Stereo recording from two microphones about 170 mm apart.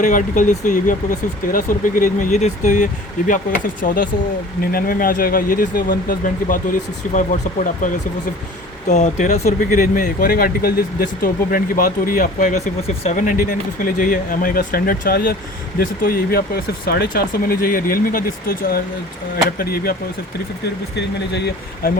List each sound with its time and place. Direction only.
0.0 s speech: 50° left (ahead or behind)
8.9 s speech: 45° left (ahead or behind); by 20.0 s 60° left (ahead or behind)
20.9 s speech: 80° left